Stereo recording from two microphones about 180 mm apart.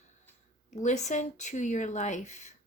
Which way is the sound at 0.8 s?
40° left (ahead or behind).